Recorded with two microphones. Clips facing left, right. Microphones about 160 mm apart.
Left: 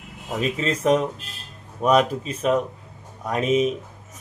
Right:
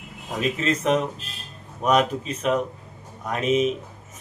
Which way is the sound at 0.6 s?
35° left (ahead or behind).